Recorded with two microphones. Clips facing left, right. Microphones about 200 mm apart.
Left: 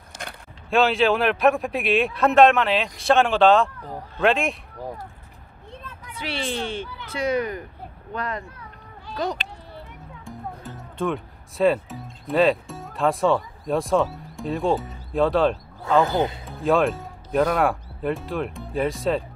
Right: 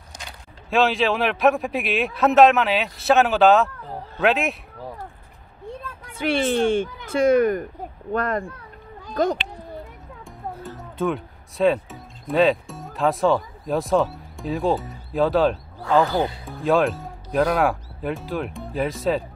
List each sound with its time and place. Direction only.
0.7 s speech: centre (ahead or behind)
6.1 s speech: 50° right (ahead or behind)
10.2 s speech: centre (ahead or behind)
16.0 s speech: 20° left (ahead or behind)
16.4 s speech: centre (ahead or behind)